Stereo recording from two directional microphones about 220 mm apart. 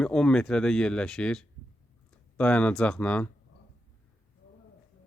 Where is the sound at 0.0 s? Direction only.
5° left (ahead or behind).